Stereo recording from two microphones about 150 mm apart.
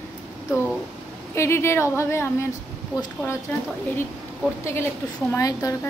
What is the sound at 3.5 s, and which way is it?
A woman's voice, 10° left (ahead or behind).